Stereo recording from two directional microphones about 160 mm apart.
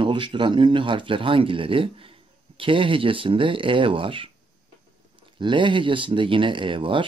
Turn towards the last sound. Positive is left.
turn(degrees=-30)  # may be behind; listen again after turning